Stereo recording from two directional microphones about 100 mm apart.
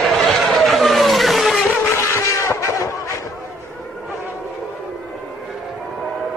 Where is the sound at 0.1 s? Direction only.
Centre (ahead or behind).